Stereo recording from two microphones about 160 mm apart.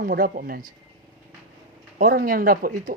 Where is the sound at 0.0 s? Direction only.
65° right (ahead or behind).